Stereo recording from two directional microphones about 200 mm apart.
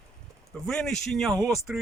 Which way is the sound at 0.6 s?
5° left (ahead or behind).